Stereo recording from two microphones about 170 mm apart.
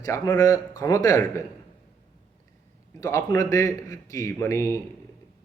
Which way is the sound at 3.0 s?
20° left (ahead or behind).